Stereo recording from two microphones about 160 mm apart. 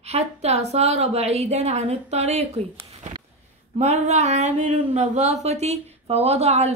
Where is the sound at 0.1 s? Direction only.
40° right (ahead or behind).